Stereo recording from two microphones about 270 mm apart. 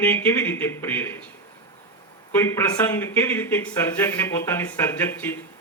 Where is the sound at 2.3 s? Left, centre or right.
Centre.